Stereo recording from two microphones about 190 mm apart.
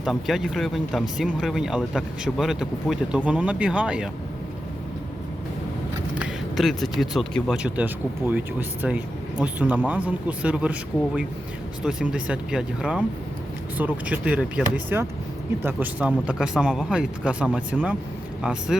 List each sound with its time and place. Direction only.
0.0 s speech: centre (ahead or behind)
6.1 s a sound: centre (ahead or behind)
7.0 s speech: centre (ahead or behind)